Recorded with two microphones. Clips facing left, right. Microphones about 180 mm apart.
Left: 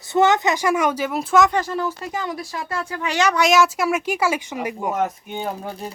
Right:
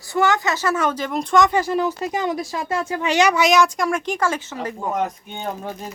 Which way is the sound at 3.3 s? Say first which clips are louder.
Even; centre (ahead or behind).